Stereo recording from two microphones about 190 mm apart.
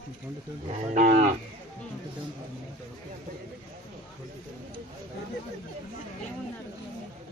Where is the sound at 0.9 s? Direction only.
40° right (ahead or behind).